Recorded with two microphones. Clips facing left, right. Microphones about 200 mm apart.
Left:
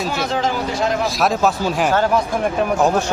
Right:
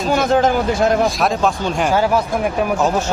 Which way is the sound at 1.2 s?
5° left (ahead or behind).